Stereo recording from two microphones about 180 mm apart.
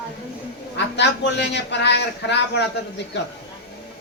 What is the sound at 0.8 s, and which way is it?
A man's voice, 75° left (ahead or behind).